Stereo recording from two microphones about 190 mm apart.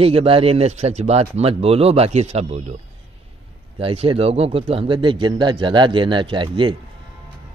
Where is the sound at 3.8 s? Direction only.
30° right (ahead or behind).